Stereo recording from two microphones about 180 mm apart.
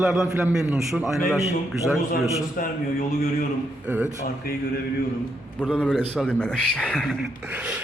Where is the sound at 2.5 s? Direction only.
55° left (ahead or behind).